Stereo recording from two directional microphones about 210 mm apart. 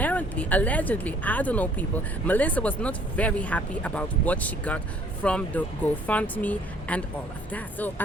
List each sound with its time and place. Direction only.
0.0 s speech: 5° left (ahead or behind)